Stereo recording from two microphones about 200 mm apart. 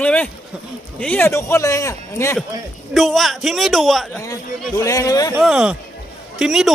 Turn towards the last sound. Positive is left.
turn(degrees=-5)  # may be behind; listen again after turning